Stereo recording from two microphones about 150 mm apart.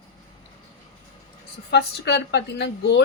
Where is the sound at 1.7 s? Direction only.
90° left.